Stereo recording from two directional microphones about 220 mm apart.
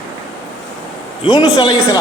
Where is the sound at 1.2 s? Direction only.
20° left (ahead or behind).